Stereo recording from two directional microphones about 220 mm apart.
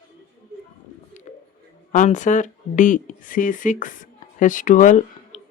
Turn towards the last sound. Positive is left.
turn(degrees=35)  # may be behind; listen again after turning